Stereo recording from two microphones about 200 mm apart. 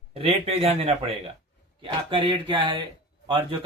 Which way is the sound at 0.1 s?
30° right (ahead or behind).